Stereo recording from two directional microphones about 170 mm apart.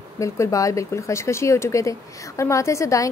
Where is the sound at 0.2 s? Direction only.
20° left (ahead or behind).